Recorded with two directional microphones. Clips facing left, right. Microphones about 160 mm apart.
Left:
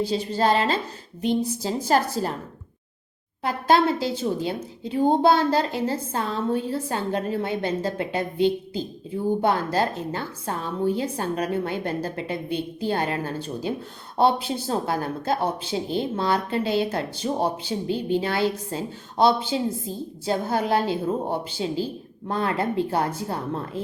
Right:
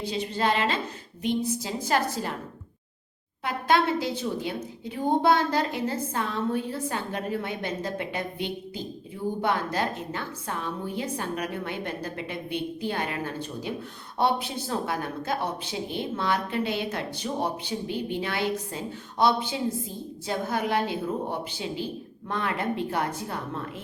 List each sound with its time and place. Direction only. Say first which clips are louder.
0.0 s a woman's voice: left 5 dB; 35° left (ahead or behind)
3.4 s a woman's voice: left 4 dB; 30° left (ahead or behind)